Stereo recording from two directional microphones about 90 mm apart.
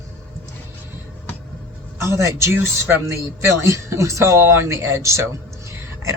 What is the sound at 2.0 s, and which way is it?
Speech, 30° right (ahead or behind).